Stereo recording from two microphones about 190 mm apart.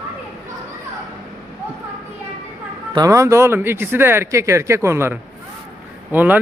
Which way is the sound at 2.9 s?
15° right (ahead or behind).